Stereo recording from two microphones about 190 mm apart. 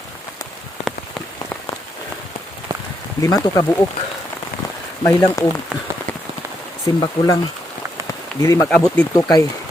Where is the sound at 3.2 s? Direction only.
20° left (ahead or behind).